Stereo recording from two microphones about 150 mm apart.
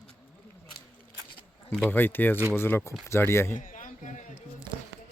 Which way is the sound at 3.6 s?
60° left (ahead or behind).